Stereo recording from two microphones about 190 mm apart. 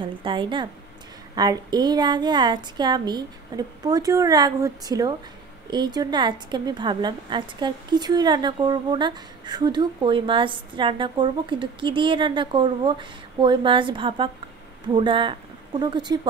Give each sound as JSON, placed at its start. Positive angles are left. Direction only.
{"t": 0.0, "sound": "a woman's voice", "side_deg": -25}